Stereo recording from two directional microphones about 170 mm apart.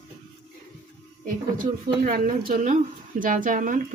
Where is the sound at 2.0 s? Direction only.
55° right (ahead or behind).